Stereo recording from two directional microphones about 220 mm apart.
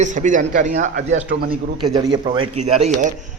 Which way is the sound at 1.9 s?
15° right (ahead or behind).